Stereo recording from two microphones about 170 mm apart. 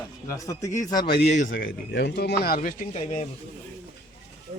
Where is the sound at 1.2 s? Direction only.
45° left (ahead or behind); by 2.6 s 70° left (ahead or behind).